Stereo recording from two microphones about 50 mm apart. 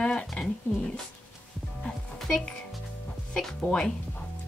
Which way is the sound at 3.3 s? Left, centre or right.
Centre.